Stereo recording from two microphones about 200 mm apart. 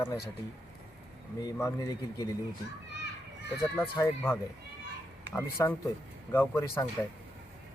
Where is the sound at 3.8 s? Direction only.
15° left (ahead or behind).